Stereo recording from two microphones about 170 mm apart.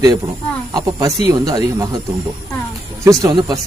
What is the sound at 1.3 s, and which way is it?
Speech, 20° right (ahead or behind).